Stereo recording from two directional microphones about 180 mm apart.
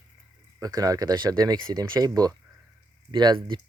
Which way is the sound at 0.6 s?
20° right (ahead or behind).